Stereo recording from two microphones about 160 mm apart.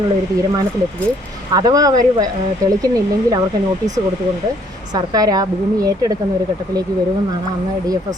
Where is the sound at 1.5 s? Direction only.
25° right (ahead or behind).